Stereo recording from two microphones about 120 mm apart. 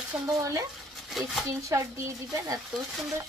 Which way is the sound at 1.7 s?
25° right (ahead or behind).